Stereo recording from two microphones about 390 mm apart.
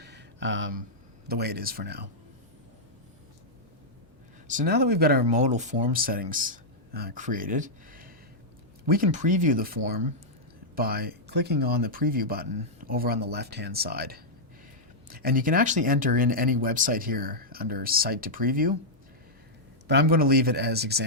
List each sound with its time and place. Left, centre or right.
0.0 s a sound: right
1.3 s speech: right
4.4 s speech: right
19.9 s speech: right